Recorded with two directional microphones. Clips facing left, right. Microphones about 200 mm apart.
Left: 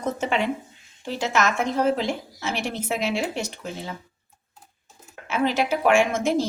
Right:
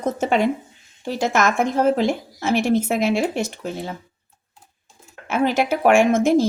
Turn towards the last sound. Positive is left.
turn(degrees=-50)  # may be behind; listen again after turning